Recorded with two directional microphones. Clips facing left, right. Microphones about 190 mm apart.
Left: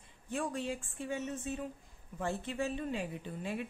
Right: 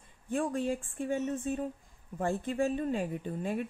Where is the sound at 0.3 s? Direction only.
50° right (ahead or behind).